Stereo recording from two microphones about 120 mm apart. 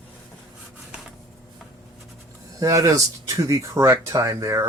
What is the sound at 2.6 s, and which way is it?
Speech, 25° right (ahead or behind).